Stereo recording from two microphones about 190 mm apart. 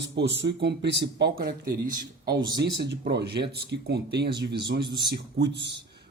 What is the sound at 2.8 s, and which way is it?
Speech, 60° right (ahead or behind).